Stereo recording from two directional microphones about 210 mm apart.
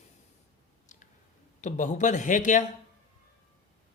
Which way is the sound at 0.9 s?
35° left (ahead or behind).